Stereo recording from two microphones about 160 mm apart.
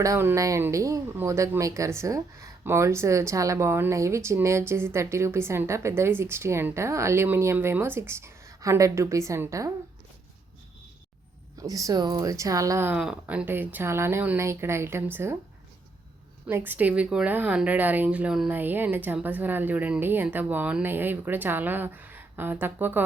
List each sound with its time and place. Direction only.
0.0 s speech: 15° right (ahead or behind)
11.5 s speech: 20° right (ahead or behind)
16.5 s speech: 15° right (ahead or behind)